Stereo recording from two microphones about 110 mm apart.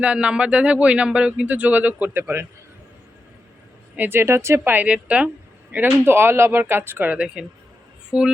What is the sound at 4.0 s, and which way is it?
A woman's voice, 20° right (ahead or behind).